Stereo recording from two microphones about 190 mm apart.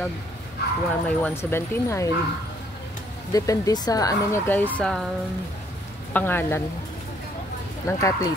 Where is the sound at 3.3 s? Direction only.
20° left (ahead or behind).